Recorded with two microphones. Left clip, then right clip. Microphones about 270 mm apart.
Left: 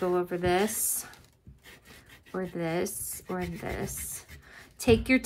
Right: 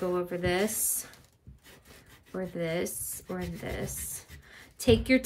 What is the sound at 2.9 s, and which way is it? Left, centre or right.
Speech, centre.